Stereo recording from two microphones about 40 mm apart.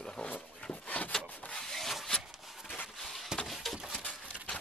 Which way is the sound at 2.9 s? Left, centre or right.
Centre.